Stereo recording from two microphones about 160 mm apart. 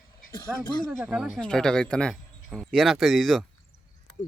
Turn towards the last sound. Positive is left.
turn(degrees=0)  # may be behind; listen again after turning